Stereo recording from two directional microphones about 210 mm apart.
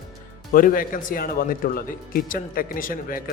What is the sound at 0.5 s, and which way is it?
A man's voice, 40° left (ahead or behind).